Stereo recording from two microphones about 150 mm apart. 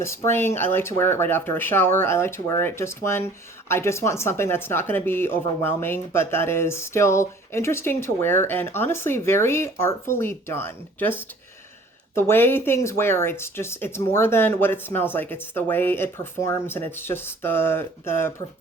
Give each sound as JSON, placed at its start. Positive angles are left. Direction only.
{"t": 0.3, "sound": "speech", "side_deg": 15}
{"t": 12.1, "sound": "speech", "side_deg": 15}